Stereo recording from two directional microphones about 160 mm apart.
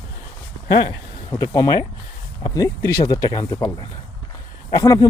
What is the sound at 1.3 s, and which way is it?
Speech, 25° left (ahead or behind).